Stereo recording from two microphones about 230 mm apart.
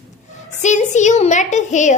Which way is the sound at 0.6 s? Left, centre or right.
Left.